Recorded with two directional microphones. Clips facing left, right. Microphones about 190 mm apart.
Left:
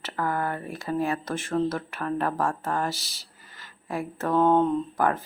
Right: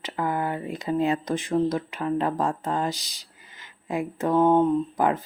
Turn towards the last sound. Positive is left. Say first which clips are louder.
# right 2 dB
turn(degrees=-15)  # may be behind; listen again after turning